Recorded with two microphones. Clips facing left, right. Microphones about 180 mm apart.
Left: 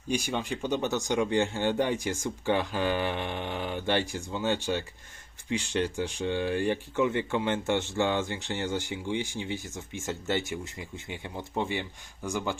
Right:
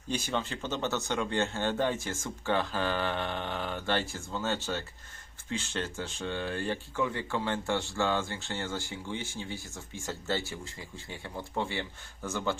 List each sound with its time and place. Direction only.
0.1 s speech: 10° left (ahead or behind)